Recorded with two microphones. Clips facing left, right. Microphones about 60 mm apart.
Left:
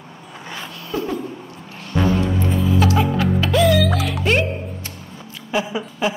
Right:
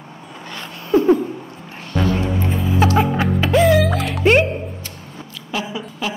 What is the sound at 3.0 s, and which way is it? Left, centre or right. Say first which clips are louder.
Music: right 1 dB; right.